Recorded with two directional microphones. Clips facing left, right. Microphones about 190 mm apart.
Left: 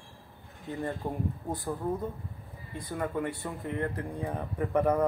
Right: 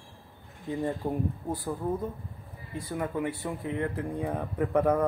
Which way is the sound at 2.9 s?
5° right (ahead or behind).